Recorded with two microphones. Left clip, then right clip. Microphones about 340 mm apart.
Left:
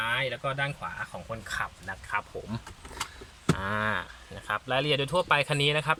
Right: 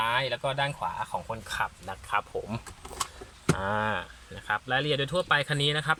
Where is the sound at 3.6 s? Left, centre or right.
Centre.